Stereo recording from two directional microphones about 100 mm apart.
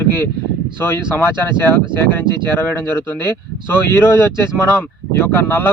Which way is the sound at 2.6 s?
20° left (ahead or behind).